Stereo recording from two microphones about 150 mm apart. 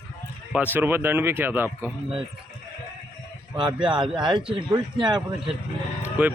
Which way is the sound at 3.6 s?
30° right (ahead or behind).